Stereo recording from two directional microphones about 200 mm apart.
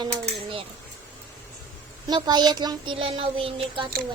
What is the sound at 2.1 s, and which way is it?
Speech, 20° right (ahead or behind).